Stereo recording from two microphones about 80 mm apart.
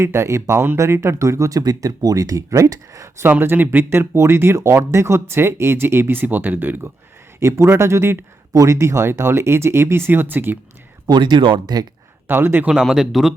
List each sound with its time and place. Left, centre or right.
0.0 s speech: right
3.2 s speech: right
7.3 s speech: right
11.1 s speech: right
12.3 s speech: right
12.8 s speech: centre